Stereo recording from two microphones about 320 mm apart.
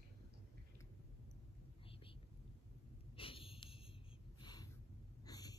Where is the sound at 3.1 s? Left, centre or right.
Centre.